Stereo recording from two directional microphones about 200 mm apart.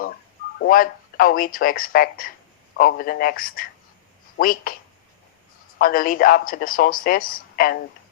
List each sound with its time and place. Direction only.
0.6 s speech: 45° left (ahead or behind)
5.8 s speech: 45° left (ahead or behind)